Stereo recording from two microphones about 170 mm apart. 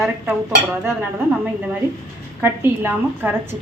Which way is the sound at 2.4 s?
15° right (ahead or behind).